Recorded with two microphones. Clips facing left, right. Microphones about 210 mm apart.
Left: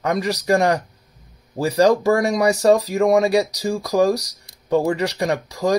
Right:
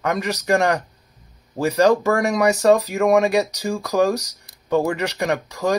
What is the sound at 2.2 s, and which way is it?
Speech, 35° left (ahead or behind).